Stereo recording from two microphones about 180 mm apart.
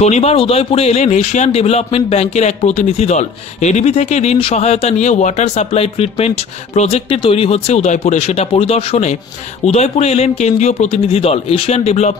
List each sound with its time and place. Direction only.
0.0 s speech: 35° left (ahead or behind)